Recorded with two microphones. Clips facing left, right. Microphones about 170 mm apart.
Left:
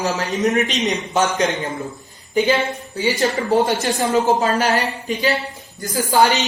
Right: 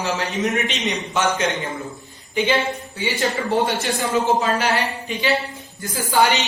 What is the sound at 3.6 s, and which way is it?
A man's voice, 40° left (ahead or behind).